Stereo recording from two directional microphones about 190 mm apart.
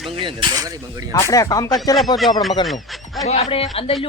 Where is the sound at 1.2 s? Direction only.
15° left (ahead or behind).